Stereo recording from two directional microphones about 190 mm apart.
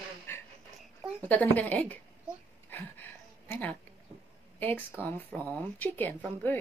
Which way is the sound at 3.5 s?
10° left (ahead or behind).